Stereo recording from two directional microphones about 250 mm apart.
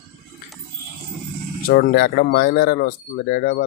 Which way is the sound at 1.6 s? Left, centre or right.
Left.